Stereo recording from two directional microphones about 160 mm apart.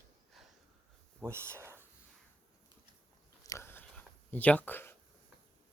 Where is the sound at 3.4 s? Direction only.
15° left (ahead or behind).